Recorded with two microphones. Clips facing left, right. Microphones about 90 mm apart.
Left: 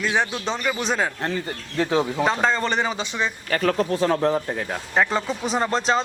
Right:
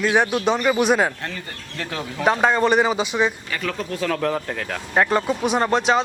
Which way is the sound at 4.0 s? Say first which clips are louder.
Left 2 dB; 25° left (ahead or behind).